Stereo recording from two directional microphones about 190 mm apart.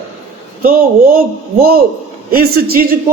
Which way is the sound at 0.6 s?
50° right (ahead or behind).